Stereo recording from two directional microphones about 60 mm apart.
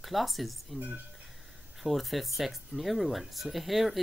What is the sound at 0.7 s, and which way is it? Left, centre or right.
Speech, right.